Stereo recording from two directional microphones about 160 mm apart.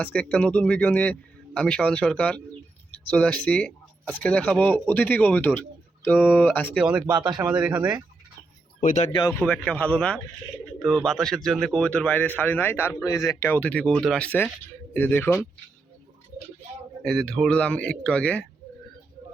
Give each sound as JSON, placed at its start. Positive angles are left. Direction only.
{"t": 0.0, "sound": "speech", "side_deg": 10}
{"t": 6.7, "sound": "a man's voice", "side_deg": -5}
{"t": 7.1, "sound": "a man's voice", "side_deg": -30}
{"t": 7.6, "sound": "speech", "side_deg": -10}
{"t": 8.8, "sound": "speech", "side_deg": 55}
{"t": 9.4, "sound": "speech", "side_deg": 5}
{"t": 17.0, "sound": "a man's voice", "side_deg": 5}